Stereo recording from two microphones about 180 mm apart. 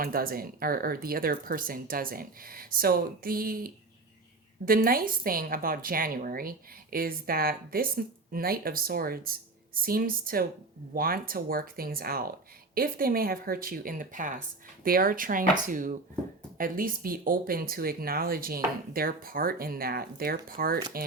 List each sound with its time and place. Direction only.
0.0 s a woman's voice: 55° right (ahead or behind)